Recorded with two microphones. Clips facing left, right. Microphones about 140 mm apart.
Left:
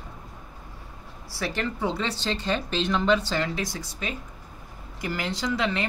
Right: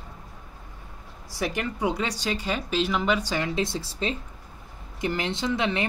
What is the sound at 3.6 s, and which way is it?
Speech, 30° right (ahead or behind).